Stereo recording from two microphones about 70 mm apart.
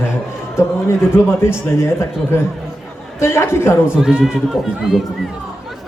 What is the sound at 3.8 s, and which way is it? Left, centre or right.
Speech, centre.